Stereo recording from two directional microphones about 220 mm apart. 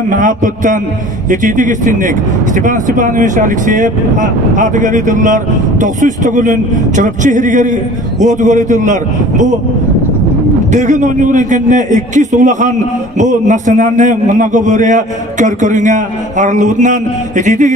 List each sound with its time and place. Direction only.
0.2 s speech: 35° right (ahead or behind)
10.7 s speech: 35° right (ahead or behind)